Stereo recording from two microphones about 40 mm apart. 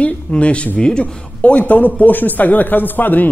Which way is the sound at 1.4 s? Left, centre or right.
Left.